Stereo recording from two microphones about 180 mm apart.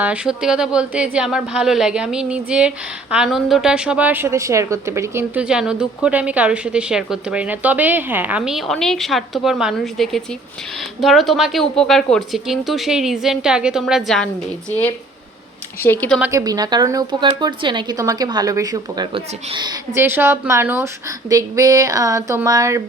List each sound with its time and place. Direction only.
0.0 s a woman's voice: 5° right (ahead or behind)
15.8 s speech: 10° left (ahead or behind)
16.2 s speech: 20° right (ahead or behind)